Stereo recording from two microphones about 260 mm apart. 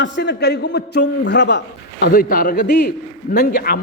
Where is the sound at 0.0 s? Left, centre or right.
Left.